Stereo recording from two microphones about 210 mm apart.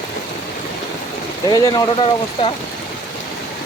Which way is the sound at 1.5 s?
20° left (ahead or behind).